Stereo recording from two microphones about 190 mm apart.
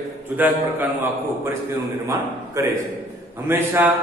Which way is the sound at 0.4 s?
10° right (ahead or behind).